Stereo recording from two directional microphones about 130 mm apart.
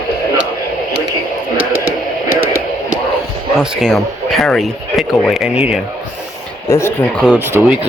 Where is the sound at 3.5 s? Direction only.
5° right (ahead or behind).